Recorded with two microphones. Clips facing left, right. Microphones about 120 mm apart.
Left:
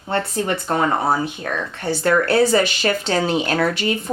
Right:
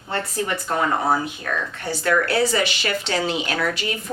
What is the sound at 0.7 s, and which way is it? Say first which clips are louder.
Speech: left 2 dB; 30° left (ahead or behind).